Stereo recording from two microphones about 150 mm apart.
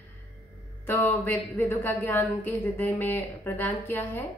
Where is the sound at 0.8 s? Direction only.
15° left (ahead or behind).